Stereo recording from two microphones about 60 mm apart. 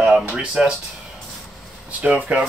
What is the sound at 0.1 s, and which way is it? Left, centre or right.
Speech, right.